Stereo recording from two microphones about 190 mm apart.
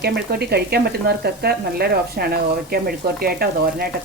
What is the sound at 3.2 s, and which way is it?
Frying, 55° right (ahead or behind).